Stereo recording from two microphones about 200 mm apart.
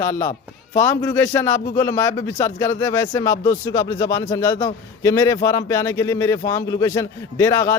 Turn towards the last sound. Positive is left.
turn(degrees=15)  # may be behind; listen again after turning